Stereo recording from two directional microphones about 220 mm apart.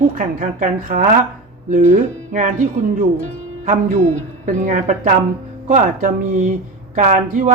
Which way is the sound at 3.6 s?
35° right (ahead or behind).